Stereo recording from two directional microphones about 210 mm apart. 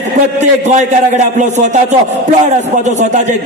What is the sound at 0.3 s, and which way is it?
Music, 35° right (ahead or behind).